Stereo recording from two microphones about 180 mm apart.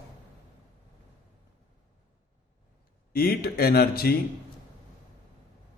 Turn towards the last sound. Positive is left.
turn(degrees=60)  # may be behind; listen again after turning